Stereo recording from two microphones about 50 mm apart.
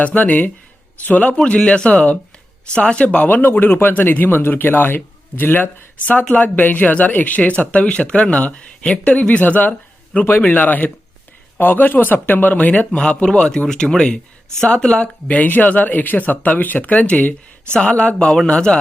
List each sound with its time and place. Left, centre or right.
0.0 s a man's voice: left
3.2 s speech: left
13.0 s a man's voice: left
17.7 s a man's voice: left